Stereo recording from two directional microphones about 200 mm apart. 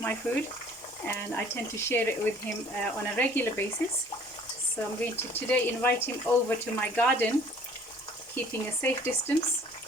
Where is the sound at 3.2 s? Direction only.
10° left (ahead or behind).